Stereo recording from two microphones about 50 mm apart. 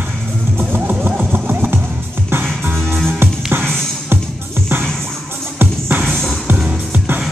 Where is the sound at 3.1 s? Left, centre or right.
Right.